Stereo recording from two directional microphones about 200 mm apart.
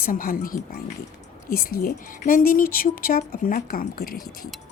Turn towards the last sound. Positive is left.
turn(degrees=45)  # may be behind; listen again after turning